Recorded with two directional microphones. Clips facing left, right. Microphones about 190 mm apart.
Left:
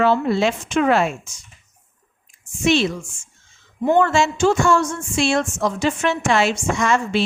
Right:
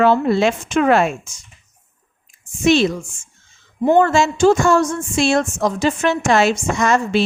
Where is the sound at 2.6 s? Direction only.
40° right (ahead or behind).